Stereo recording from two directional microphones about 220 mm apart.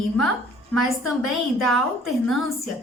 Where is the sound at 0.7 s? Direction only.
Centre (ahead or behind).